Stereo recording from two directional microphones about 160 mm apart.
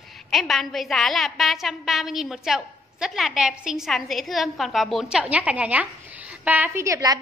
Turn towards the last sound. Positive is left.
turn(degrees=-20)  # may be behind; listen again after turning